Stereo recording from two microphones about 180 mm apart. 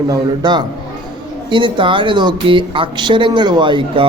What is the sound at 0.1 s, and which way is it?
Speech, 25° right (ahead or behind).